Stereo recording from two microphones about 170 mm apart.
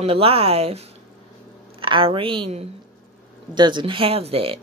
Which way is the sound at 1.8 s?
30° right (ahead or behind).